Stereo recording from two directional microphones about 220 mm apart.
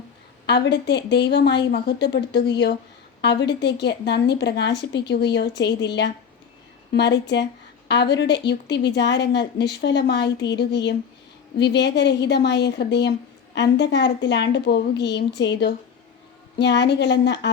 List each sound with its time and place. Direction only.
0.4 s a woman's voice: 50° left (ahead or behind)